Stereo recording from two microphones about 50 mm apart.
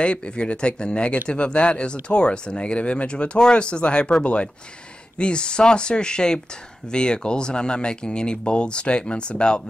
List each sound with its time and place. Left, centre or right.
0.0 s speech: left